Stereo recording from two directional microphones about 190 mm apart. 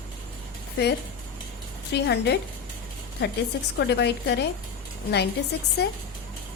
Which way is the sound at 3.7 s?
65° left (ahead or behind).